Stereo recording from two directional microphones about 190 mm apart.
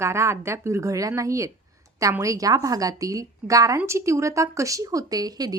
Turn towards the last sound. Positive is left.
turn(degrees=-20)  # may be behind; listen again after turning